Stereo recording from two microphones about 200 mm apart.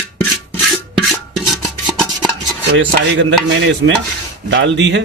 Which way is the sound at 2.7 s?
65° right (ahead or behind).